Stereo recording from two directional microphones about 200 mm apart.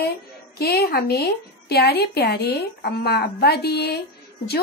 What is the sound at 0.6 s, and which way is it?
A woman's voice, 50° left (ahead or behind).